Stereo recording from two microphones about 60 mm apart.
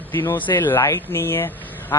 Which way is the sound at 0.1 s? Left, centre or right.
Left.